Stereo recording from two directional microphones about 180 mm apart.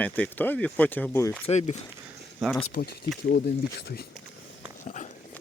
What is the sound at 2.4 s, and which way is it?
Speech, centre (ahead or behind).